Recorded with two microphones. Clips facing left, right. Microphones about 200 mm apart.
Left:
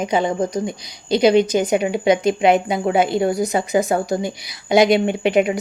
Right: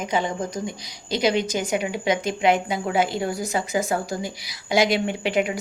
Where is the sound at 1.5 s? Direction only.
20° left (ahead or behind).